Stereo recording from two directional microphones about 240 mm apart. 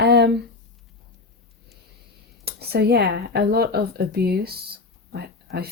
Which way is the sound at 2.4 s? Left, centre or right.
Right.